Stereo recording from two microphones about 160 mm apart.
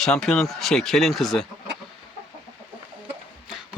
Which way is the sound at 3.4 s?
5° right (ahead or behind).